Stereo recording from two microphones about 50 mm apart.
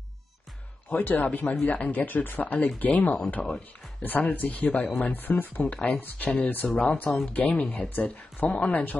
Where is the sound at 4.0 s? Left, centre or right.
Left.